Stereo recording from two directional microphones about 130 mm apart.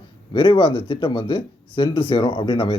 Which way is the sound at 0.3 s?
40° left (ahead or behind).